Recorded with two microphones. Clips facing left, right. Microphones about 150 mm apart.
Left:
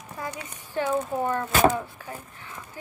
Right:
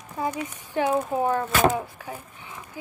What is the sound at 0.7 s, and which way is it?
Speech, 15° right (ahead or behind).